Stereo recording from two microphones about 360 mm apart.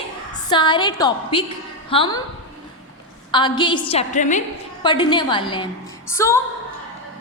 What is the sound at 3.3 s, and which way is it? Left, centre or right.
A woman's voice, centre.